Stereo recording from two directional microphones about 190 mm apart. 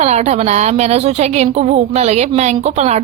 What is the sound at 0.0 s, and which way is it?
A woman's voice, 35° right (ahead or behind).